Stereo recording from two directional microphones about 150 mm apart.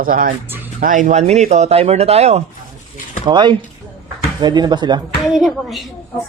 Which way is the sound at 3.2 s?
30° right (ahead or behind).